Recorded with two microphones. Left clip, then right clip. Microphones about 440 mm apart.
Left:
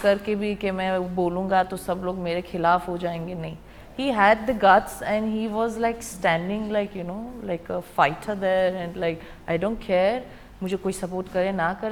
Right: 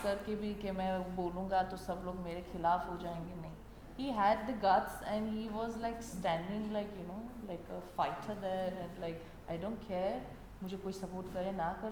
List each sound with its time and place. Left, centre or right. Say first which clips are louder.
0.0 s a woman's voice: left 15 dB; left
7.4 s a woman's voice: left 17 dB; left
11.3 s a woman's voice: left 14 dB; left